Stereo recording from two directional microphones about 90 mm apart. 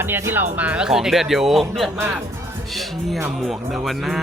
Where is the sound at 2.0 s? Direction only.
20° right (ahead or behind).